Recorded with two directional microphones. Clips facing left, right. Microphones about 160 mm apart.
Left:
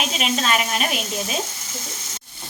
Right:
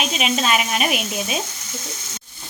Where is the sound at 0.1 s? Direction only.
5° right (ahead or behind).